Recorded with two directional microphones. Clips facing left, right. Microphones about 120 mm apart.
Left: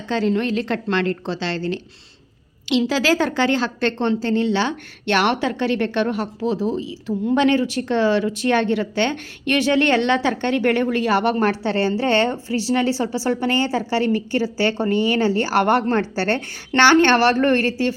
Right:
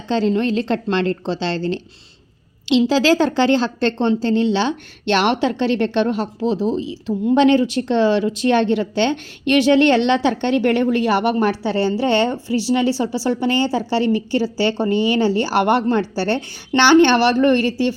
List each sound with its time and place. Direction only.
0.1 s a woman's voice: 25° right (ahead or behind)